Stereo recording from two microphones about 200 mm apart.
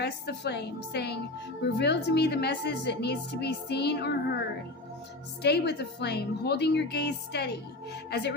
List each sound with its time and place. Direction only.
0.0 s a woman's voice: 55° left (ahead or behind)